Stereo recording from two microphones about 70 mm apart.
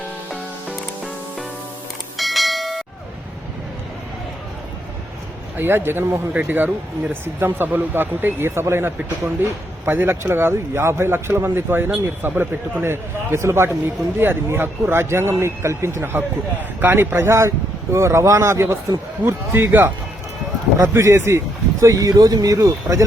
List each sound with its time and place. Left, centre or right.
2.1 s bell: centre
5.5 s speech: right
16.6 s speech: right
20.7 s speech: right